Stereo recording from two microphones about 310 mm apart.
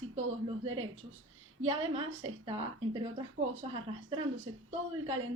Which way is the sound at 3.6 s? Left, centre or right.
Centre.